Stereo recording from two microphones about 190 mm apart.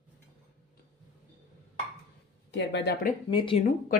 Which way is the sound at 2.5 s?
70° left (ahead or behind).